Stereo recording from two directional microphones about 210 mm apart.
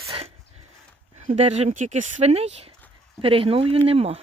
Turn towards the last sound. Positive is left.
turn(degrees=-30)  # may be behind; listen again after turning